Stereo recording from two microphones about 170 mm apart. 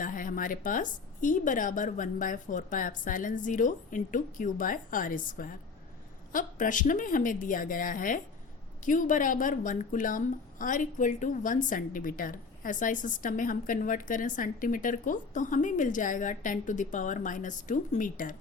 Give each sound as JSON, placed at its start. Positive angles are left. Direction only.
{"t": 0.0, "sound": "a woman's voice", "side_deg": 50}